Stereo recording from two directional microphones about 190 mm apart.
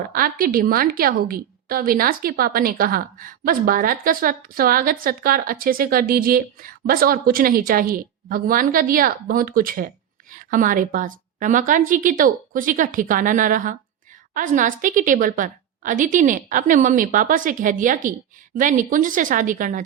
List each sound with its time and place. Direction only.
0.1 s a woman's voice: 50° right (ahead or behind)